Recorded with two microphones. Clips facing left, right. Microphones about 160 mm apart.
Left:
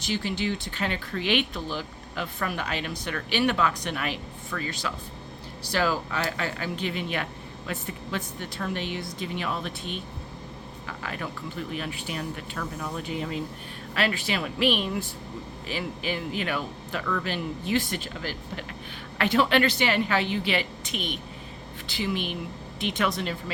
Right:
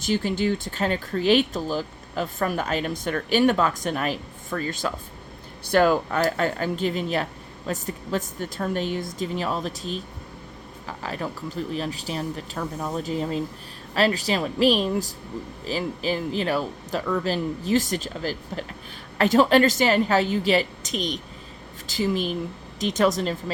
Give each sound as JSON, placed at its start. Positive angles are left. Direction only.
{"t": 0.0, "sound": "speech", "side_deg": -45}